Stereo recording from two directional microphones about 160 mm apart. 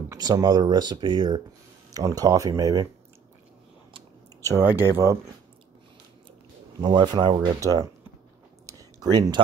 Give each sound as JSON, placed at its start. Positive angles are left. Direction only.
{"t": 0.1, "sound": "speech", "side_deg": -25}
{"t": 4.6, "sound": "speech", "side_deg": -15}
{"t": 6.8, "sound": "speech", "side_deg": -30}
{"t": 8.6, "sound": "a sound", "side_deg": -20}